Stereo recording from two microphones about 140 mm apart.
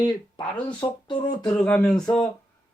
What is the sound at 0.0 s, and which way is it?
Speech, 30° left (ahead or behind).